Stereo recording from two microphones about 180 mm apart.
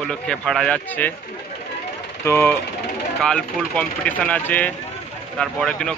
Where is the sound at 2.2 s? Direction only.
15° left (ahead or behind).